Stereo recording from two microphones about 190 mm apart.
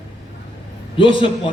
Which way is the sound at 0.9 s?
25° left (ahead or behind).